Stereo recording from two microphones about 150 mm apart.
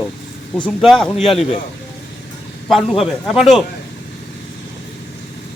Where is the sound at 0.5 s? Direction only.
5° left (ahead or behind).